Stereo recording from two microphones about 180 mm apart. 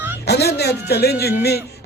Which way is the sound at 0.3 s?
65° left (ahead or behind).